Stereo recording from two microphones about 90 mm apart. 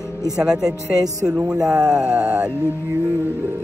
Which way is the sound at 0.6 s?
40° right (ahead or behind).